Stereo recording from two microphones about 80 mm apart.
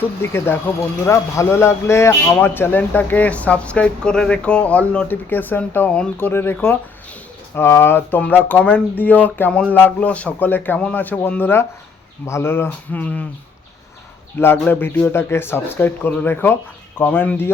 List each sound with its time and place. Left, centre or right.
0.0 s a man's voice: left
14.3 s speech: left